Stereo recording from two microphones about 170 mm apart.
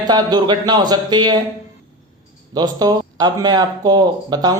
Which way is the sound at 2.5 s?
25° right (ahead or behind).